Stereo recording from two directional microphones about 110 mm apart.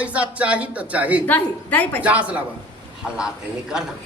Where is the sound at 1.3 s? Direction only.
15° left (ahead or behind).